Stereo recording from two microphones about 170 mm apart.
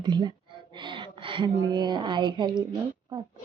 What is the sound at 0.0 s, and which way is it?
Speech, 25° right (ahead or behind).